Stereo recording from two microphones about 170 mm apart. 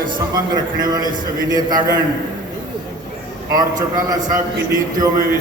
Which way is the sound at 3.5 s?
20° right (ahead or behind).